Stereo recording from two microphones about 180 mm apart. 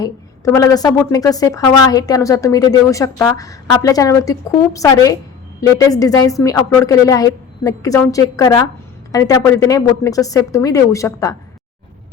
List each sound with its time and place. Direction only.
0.0 s a woman's voice: 15° left (ahead or behind)